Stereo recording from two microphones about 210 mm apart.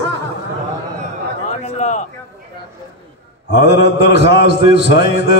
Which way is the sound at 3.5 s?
55° left (ahead or behind).